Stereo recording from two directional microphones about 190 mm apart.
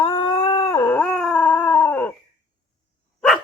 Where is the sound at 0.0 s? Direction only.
20° left (ahead or behind).